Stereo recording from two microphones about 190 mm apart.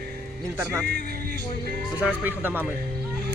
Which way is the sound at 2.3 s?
10° right (ahead or behind).